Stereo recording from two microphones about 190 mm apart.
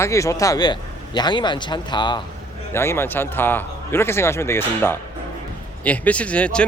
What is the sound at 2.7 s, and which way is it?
Speech, 15° left (ahead or behind).